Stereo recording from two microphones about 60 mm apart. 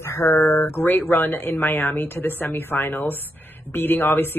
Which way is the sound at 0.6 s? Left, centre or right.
Left.